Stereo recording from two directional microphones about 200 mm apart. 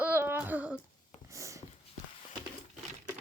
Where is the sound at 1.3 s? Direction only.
15° right (ahead or behind).